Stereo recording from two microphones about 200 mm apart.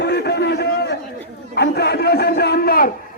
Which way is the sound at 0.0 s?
55° left (ahead or behind).